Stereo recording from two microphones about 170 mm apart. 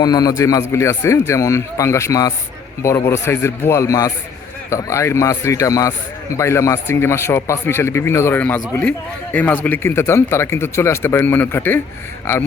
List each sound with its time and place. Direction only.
0.0 s a man's voice: 20° left (ahead or behind)